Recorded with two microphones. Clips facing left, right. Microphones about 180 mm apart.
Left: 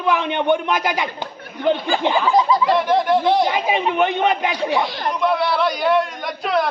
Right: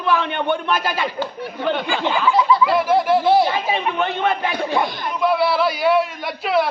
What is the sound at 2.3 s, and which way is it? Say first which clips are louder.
Speech: right 2 dB; 40° left (ahead or behind).